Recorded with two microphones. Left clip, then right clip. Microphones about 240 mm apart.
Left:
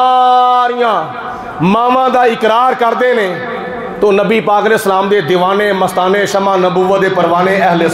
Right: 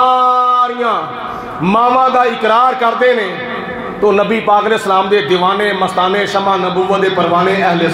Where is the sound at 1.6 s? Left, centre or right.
Left.